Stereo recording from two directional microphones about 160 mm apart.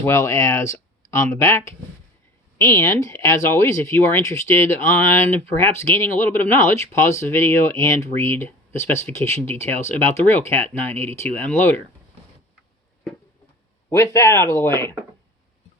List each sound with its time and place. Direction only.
0.0 s speech: 15° left (ahead or behind)
13.9 s speech: 20° left (ahead or behind)